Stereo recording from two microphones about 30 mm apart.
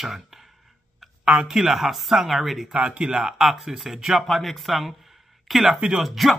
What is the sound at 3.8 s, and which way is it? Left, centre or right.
Speech, centre.